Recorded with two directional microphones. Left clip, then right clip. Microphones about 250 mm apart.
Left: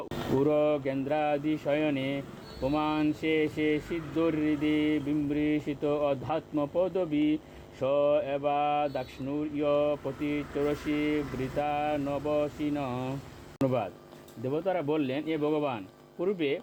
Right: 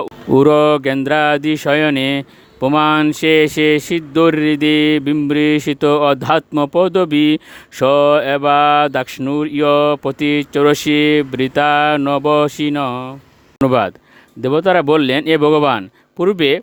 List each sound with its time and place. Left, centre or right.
0.3 s speech: right
13.7 s speech: right